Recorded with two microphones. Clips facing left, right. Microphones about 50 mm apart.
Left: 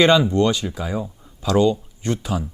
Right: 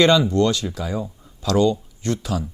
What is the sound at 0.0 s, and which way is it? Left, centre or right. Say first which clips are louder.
Speech: left 1 dB; centre.